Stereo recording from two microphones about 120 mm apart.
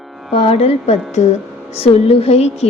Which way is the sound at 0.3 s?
55° left (ahead or behind).